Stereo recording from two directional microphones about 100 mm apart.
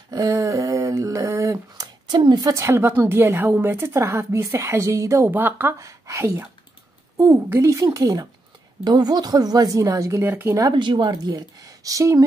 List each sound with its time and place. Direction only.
0.1 s a sound: 35° right (ahead or behind)
2.0 s a woman's voice: 50° right (ahead or behind)
2.5 s a woman's voice: 25° right (ahead or behind)
5.3 s a woman's voice: 20° right (ahead or behind)
7.8 s speech: 40° right (ahead or behind)
10.7 s speech: 50° right (ahead or behind); by 12.2 s 35° right (ahead or behind)